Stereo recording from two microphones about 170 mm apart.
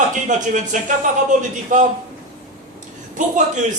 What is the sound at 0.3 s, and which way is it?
A man's voice, 45° right (ahead or behind).